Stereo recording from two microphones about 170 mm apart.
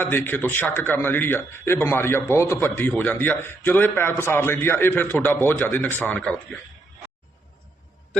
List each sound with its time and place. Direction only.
0.0 s a man's voice: 10° left (ahead or behind)